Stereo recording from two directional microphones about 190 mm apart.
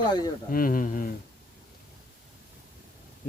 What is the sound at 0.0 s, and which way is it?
Speech, 20° left (ahead or behind).